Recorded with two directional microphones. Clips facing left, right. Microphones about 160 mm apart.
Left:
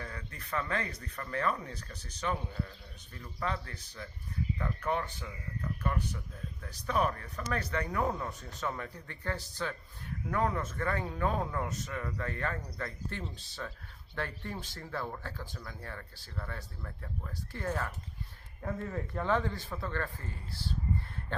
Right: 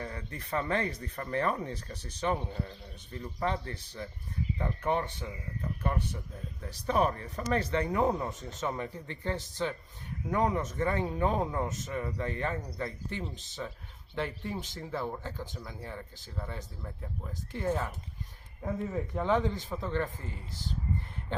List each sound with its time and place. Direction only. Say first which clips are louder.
0.0 s speech: right 4 dB; 25° right (ahead or behind)